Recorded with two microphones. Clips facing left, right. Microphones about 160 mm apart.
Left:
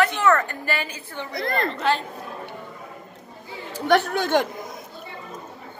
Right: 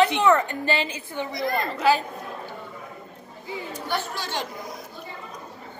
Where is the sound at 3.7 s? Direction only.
70° left (ahead or behind); by 4.5 s 55° left (ahead or behind).